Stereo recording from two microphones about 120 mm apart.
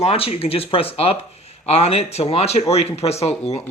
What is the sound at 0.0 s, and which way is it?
Speech, 55° left (ahead or behind).